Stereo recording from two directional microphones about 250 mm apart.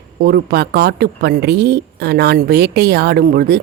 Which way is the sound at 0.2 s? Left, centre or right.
Right.